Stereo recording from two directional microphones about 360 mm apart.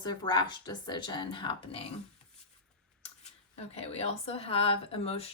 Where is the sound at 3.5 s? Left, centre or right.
Centre.